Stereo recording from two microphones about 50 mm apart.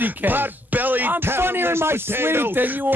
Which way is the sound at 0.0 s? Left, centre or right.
Right.